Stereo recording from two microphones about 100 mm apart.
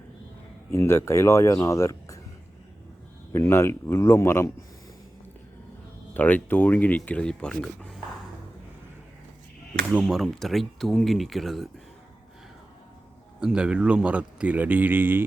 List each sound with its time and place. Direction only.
0.7 s speech: 25° left (ahead or behind)
3.3 s speech: 25° left (ahead or behind)
6.1 s speech: 15° left (ahead or behind)
10.0 s speech: centre (ahead or behind)
13.4 s a man's voice: 10° right (ahead or behind)